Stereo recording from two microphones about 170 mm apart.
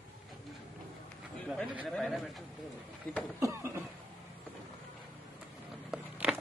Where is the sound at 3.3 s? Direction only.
15° right (ahead or behind).